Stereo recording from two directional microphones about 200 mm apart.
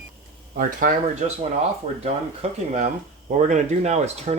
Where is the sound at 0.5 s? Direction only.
40° right (ahead or behind).